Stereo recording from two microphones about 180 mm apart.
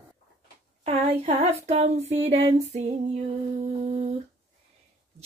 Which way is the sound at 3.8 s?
35° right (ahead or behind).